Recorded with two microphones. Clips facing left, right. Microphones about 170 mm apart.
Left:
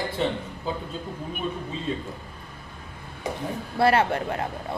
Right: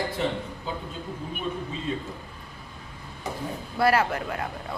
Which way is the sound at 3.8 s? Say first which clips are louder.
Left 2 dB; 30° left (ahead or behind).